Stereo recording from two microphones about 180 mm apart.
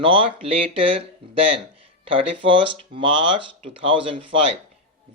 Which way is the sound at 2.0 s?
30° right (ahead or behind).